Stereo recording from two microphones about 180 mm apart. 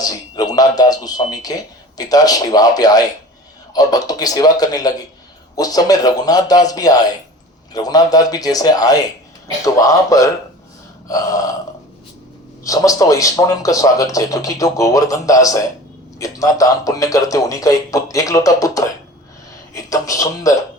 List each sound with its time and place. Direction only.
0.0 s speech: 20° left (ahead or behind)
12.6 s speech: 20° left (ahead or behind)